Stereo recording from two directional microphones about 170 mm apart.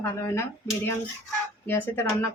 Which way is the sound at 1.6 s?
15° left (ahead or behind).